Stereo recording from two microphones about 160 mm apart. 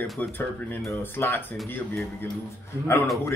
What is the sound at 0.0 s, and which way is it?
Speech, centre (ahead or behind).